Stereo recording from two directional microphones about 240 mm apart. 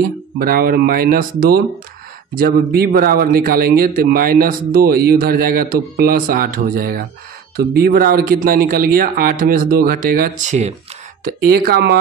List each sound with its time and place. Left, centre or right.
0.4 s speech: right